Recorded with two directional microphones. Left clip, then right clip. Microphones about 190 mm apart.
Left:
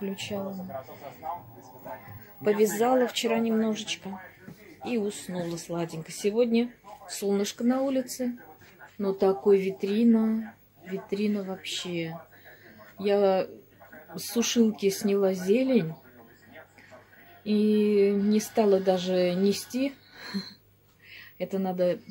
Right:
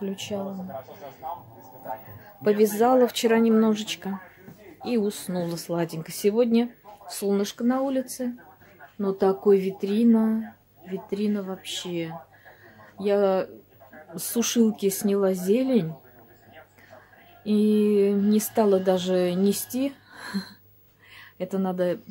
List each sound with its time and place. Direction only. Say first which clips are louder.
0.0 s speech: right 2 dB; 15° right (ahead or behind)
2.4 s speech: right 3 dB; 20° right (ahead or behind); by 4.1 s 35° right (ahead or behind)
4.8 s speech: right 4 dB; 25° right (ahead or behind)
17.4 s speech: right 2 dB; 15° right (ahead or behind)